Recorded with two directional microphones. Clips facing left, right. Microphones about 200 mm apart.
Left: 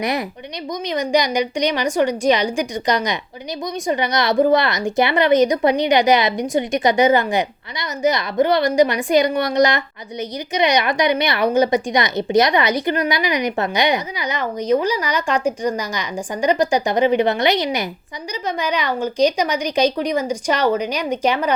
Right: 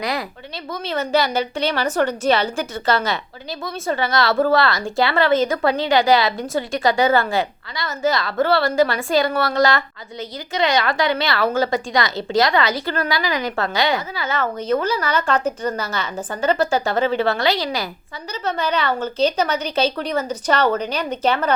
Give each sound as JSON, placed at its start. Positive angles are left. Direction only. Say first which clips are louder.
{"t": 0.0, "sound": "a woman's voice", "louder": "left 3 dB", "side_deg": 20}